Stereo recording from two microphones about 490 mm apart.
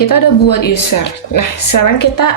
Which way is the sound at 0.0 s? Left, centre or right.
Left.